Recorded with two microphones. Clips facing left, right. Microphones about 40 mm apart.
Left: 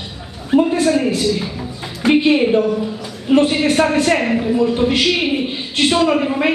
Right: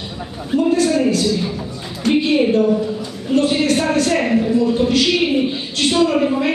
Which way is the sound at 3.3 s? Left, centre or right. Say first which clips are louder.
Left 2 dB; left.